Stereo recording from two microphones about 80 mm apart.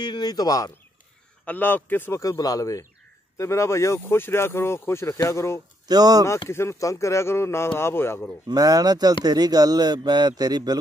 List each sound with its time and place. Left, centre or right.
0.0 s speech: left
1.4 s a man's voice: centre
2.1 s speech: left
5.9 s a man's voice: right
6.5 s speech: left
8.5 s a man's voice: right